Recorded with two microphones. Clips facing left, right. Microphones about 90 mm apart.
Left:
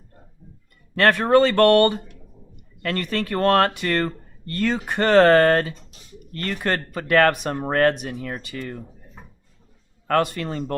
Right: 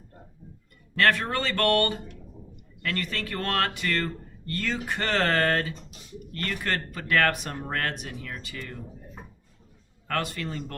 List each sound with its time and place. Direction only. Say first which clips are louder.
0.9 s speech: left 8 dB; 45° left (ahead or behind)
7.9 s speech: left 7 dB; 60° left (ahead or behind)
10.1 s speech: left 9 dB; 50° left (ahead or behind)